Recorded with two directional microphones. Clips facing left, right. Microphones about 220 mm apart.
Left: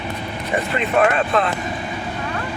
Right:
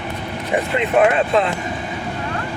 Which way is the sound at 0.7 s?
20° right (ahead or behind).